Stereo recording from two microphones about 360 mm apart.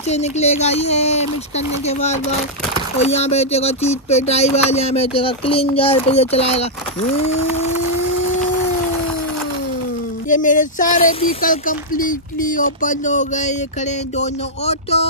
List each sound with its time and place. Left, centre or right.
0.1 s speech: centre
10.2 s speech: left